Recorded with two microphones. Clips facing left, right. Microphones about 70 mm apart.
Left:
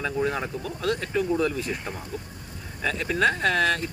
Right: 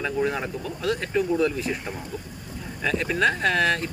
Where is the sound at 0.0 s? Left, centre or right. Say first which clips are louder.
Right 1 dB; centre.